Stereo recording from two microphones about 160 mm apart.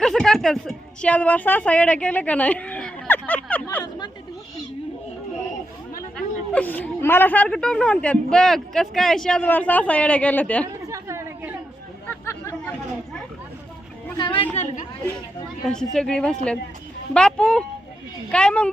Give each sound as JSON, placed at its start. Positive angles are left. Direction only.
{"t": 0.0, "sound": "a woman's voice", "side_deg": 5}
{"t": 6.1, "sound": "a woman's voice", "side_deg": 10}
{"t": 10.8, "sound": "chatter", "side_deg": -20}
{"t": 12.2, "sound": "hubbub", "side_deg": 15}
{"t": 14.2, "sound": "a woman's voice", "side_deg": 30}
{"t": 14.5, "sound": "speech", "side_deg": 45}
{"t": 15.6, "sound": "a woman's voice", "side_deg": 5}